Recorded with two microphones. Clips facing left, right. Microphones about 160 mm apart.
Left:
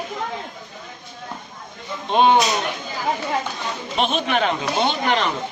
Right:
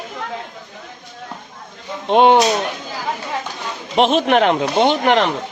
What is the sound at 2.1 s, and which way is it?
Speech, 75° right (ahead or behind).